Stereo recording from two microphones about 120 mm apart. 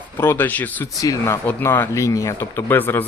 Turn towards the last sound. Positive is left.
turn(degrees=20)  # may be behind; listen again after turning